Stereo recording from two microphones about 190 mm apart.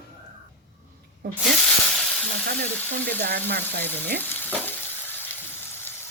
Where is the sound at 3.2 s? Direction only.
60° right (ahead or behind).